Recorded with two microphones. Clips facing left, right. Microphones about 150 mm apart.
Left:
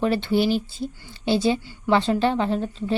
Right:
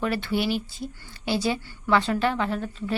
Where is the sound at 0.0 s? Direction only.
30° left (ahead or behind).